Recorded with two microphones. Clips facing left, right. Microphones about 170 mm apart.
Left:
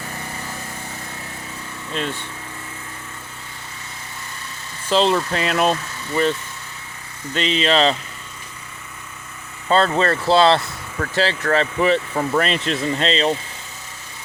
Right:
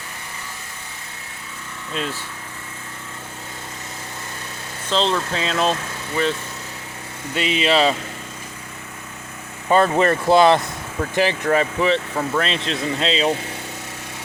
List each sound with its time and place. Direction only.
1.9 s speech: centre (ahead or behind)
4.9 s speech: 5° left (ahead or behind)
7.3 s speech: 10° right (ahead or behind)
9.6 s speech: 15° right (ahead or behind)
11.8 s speech: 5° left (ahead or behind)